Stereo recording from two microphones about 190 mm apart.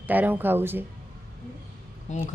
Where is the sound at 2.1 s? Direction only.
40° left (ahead or behind).